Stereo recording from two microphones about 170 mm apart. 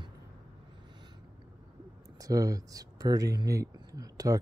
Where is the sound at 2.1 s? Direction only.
20° right (ahead or behind).